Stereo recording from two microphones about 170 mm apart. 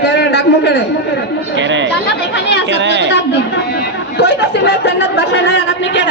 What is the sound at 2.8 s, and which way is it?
Speech, 90° right.